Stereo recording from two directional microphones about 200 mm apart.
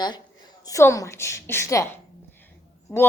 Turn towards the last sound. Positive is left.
turn(degrees=10)  # may be behind; listen again after turning